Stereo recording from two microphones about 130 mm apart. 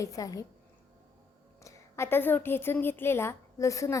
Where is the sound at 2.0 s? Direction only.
15° left (ahead or behind).